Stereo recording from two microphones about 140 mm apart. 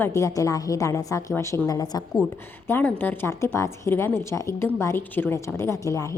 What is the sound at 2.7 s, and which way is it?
A woman's voice, 15° left (ahead or behind).